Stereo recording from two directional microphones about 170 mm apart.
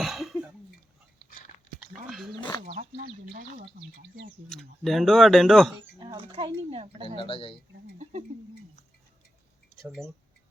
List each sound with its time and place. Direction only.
0.0 s cough: centre (ahead or behind)
1.3 s biting: 50° left (ahead or behind)
1.9 s dog: centre (ahead or behind)
2.6 s speech: 55° right (ahead or behind)
4.4 s speech: centre (ahead or behind)
6.0 s speech: 25° right (ahead or behind)
7.2 s a man's voice: 30° left (ahead or behind)